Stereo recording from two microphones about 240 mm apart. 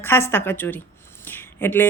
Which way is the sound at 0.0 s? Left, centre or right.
Centre.